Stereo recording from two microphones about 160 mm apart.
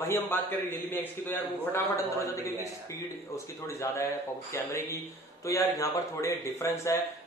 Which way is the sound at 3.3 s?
20° left (ahead or behind).